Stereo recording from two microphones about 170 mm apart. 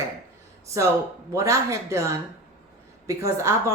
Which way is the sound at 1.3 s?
15° right (ahead or behind).